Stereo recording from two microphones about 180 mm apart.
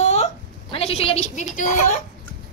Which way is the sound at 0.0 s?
35° left (ahead or behind).